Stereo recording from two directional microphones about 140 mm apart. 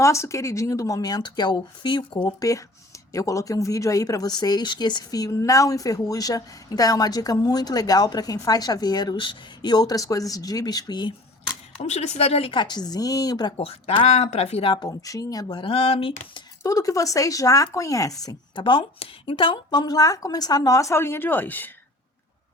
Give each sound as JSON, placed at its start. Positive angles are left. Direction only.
{"t": 0.0, "sound": "speech", "side_deg": 20}
{"t": 3.1, "sound": "speech", "side_deg": 25}
{"t": 11.8, "sound": "speech", "side_deg": 55}
{"t": 13.6, "sound": "speech", "side_deg": 45}
{"t": 15.4, "sound": "speech", "side_deg": 40}
{"t": 16.6, "sound": "speech", "side_deg": 25}